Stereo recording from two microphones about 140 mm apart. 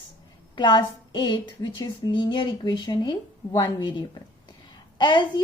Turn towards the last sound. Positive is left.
turn(degrees=35)  # may be behind; listen again after turning